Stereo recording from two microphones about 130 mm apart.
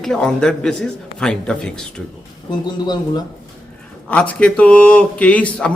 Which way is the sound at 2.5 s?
35° left (ahead or behind).